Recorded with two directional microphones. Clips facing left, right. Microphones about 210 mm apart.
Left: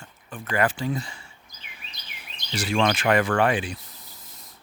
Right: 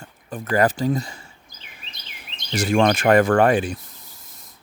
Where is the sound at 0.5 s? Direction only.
40° right (ahead or behind).